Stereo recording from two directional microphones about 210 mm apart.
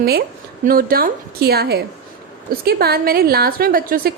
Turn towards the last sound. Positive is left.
turn(degrees=-45)  # may be behind; listen again after turning